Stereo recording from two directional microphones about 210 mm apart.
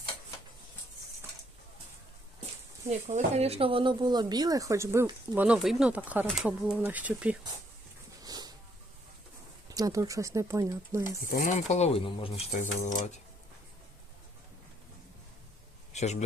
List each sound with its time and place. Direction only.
3.1 s speech: 35° right (ahead or behind); by 7.3 s 5° right (ahead or behind)
8.2 s a sound: 20° right (ahead or behind)
9.6 s speech: 15° right (ahead or behind)
11.3 s speech: 40° left (ahead or behind)
12.5 s speech: 35° left (ahead or behind)
15.9 s a sound: 30° left (ahead or behind)